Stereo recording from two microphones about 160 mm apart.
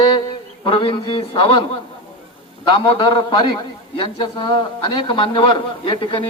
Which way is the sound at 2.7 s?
30° left (ahead or behind).